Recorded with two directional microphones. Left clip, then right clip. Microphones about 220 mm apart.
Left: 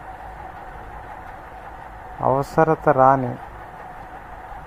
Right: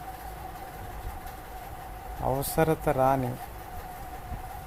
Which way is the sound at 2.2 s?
20° left (ahead or behind).